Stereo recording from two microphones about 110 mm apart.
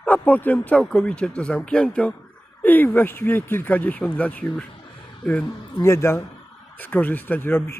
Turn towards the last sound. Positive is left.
turn(degrees=20)  # may be behind; listen again after turning